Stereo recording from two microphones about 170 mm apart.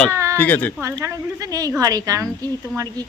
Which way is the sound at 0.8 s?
15° right (ahead or behind).